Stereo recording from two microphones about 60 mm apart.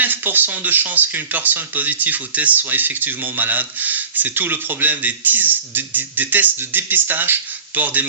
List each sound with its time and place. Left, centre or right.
0.0 s speech: right